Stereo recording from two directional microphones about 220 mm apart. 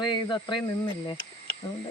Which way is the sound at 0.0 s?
20° left (ahead or behind).